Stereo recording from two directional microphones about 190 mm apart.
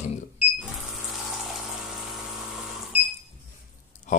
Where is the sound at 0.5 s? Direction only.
Centre (ahead or behind).